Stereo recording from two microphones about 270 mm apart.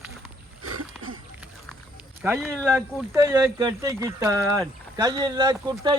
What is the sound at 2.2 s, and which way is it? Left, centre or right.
Speech, centre.